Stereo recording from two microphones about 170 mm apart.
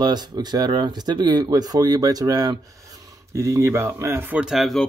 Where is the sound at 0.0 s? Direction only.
25° right (ahead or behind).